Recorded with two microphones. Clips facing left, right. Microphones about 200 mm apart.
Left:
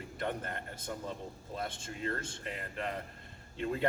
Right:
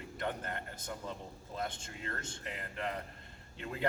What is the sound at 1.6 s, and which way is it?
A man's voice, 25° left (ahead or behind).